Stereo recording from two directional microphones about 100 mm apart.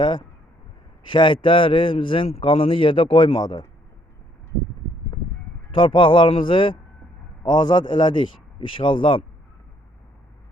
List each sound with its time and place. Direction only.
0.0 s a man's voice: 50° left (ahead or behind)
5.7 s a man's voice: 55° left (ahead or behind)